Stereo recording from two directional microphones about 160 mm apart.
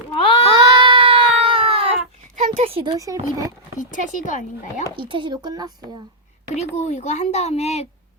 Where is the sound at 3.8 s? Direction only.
55° left (ahead or behind).